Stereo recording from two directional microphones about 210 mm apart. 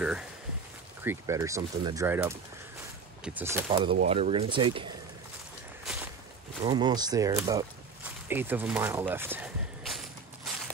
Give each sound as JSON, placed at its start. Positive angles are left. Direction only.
{"t": 1.0, "sound": "speech", "side_deg": -15}
{"t": 3.6, "sound": "speech", "side_deg": -25}
{"t": 6.6, "sound": "a sound", "side_deg": -20}